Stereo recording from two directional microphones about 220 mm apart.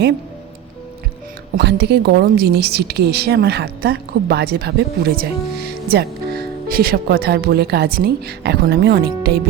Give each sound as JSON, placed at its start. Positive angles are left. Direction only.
{"t": 1.5, "sound": "a woman's voice", "side_deg": -50}